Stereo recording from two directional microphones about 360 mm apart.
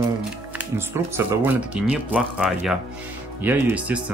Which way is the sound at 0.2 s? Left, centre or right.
Centre.